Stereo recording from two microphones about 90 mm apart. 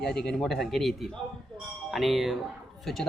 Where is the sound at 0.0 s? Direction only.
5° left (ahead or behind).